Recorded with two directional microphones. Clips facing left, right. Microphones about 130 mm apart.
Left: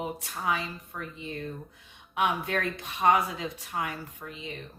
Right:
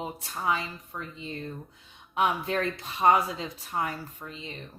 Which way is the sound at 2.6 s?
25° right (ahead or behind).